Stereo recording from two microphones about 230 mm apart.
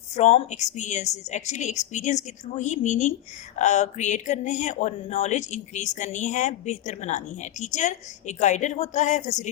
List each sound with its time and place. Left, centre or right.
0.2 s a woman's voice: left